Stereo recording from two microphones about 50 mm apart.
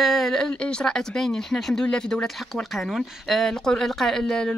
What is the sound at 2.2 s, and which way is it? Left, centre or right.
Speech, centre.